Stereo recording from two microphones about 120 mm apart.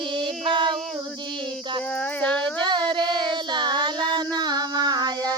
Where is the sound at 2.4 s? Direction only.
40° right (ahead or behind).